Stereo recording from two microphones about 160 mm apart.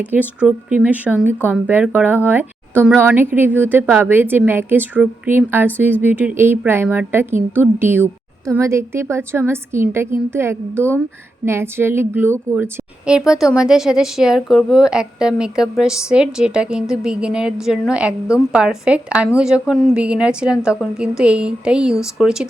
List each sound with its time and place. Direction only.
0.0 s a woman's voice: 10° right (ahead or behind)